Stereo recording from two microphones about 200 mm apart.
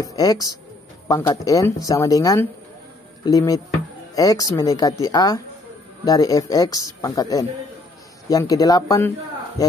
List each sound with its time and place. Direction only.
0.0 s speech: 20° left (ahead or behind)